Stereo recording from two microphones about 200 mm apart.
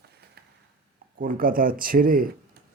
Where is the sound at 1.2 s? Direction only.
45° right (ahead or behind).